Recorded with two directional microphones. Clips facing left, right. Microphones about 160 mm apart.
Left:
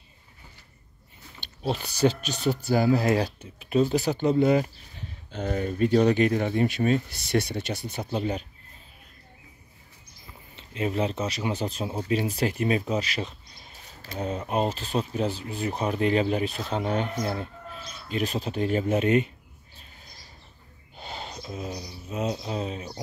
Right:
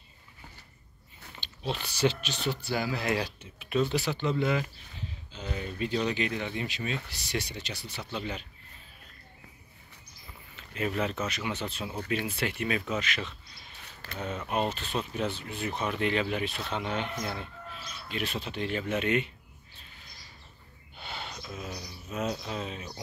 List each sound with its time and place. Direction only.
1.6 s speech: 40° left (ahead or behind)
5.3 s speech: 50° left (ahead or behind)
10.5 s speech: 30° left (ahead or behind)
20.9 s speech: 35° left (ahead or behind)